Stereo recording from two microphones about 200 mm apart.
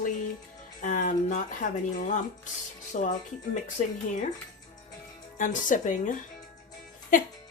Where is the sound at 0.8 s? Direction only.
40° left (ahead or behind).